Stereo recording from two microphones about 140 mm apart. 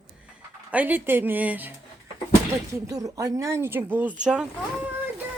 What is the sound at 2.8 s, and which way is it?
A woman's voice, 25° right (ahead or behind).